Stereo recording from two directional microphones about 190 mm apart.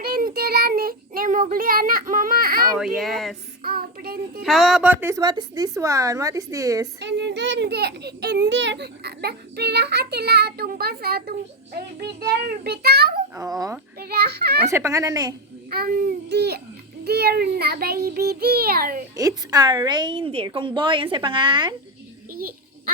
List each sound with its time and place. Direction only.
0.0 s child singing: 50° right (ahead or behind)
2.7 s speech: centre (ahead or behind)
3.6 s child singing: 55° right (ahead or behind)
4.4 s a woman's voice: centre (ahead or behind); by 6.8 s 15° right (ahead or behind)
7.0 s a child's voice: 70° right (ahead or behind)
13.3 s a woman's voice: 20° right (ahead or behind)
14.0 s a child's voice: 55° right (ahead or behind)
14.7 s a woman's voice: 15° right (ahead or behind)
15.7 s babbling: 50° right (ahead or behind)
17.0 s a child's voice: 55° right (ahead or behind)
19.1 s a woman's voice: 20° right (ahead or behind)
22.3 s a child's voice: 50° right (ahead or behind)